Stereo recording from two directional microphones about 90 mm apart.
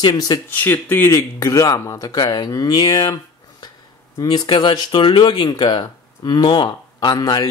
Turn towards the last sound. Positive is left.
turn(degrees=50)  # may be behind; listen again after turning